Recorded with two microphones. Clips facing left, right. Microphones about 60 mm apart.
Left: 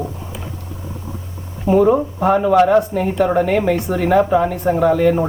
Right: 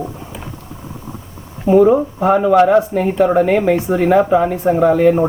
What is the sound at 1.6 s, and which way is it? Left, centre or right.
Speech, centre.